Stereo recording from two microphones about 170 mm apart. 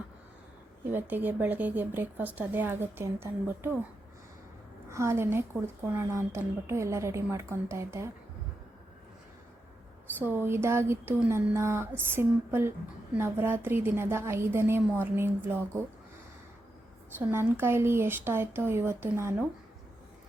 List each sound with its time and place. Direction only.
0.9 s a woman's voice: 10° right (ahead or behind)
4.9 s a woman's voice: 15° right (ahead or behind)
10.2 s a woman's voice: 15° right (ahead or behind)
17.2 s a woman's voice: 15° right (ahead or behind)